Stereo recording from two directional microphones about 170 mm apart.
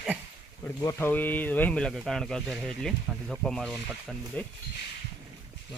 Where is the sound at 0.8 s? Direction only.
15° left (ahead or behind).